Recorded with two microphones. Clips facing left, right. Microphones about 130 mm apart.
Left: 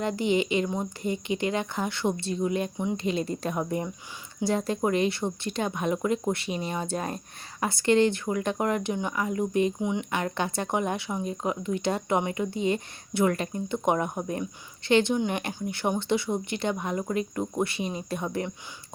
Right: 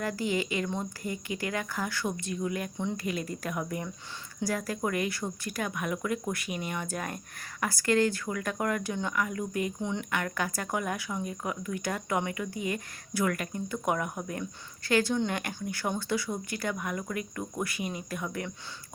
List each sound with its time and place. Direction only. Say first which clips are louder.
0.0 s speech: left 5 dB; 20° left (ahead or behind)